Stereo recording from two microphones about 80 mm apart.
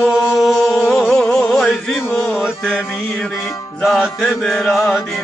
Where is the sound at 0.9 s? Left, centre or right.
Centre.